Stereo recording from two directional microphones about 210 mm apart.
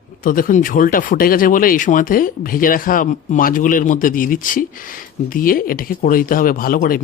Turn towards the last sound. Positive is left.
turn(degrees=45)  # may be behind; listen again after turning